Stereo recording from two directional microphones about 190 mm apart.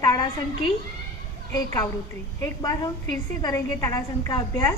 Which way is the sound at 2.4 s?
20° left (ahead or behind).